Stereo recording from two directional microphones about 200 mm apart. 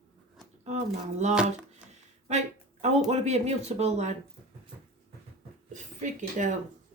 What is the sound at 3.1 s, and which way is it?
Speech, 35° right (ahead or behind).